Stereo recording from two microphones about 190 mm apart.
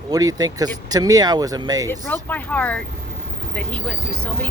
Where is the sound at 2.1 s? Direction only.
10° left (ahead or behind).